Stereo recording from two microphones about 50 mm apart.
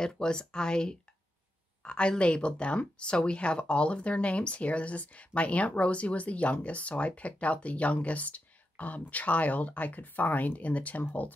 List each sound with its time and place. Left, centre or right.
0.0 s speech: centre